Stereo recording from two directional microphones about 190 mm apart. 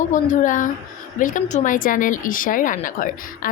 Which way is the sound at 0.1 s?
40° left (ahead or behind).